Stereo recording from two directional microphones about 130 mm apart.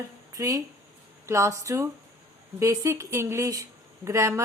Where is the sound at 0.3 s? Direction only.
25° right (ahead or behind).